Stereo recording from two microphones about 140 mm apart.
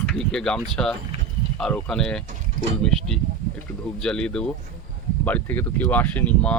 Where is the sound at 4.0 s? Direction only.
5° left (ahead or behind).